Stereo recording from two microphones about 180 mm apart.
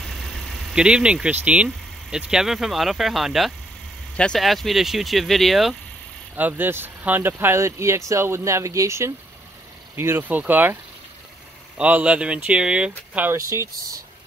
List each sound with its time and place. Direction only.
0.7 s speech: 5° right (ahead or behind)
11.8 s speech: 5° right (ahead or behind)